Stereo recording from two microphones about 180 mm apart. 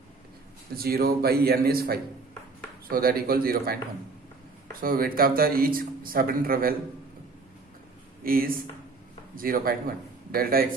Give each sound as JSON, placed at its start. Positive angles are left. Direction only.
{"t": 0.8, "sound": "speech", "side_deg": -55}
{"t": 4.8, "sound": "speech", "side_deg": -55}
{"t": 8.2, "sound": "speech", "side_deg": -55}